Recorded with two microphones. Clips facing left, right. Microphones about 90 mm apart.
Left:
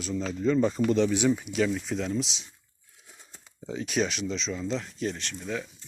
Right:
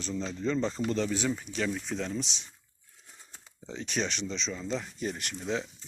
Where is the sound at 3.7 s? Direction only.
5° left (ahead or behind).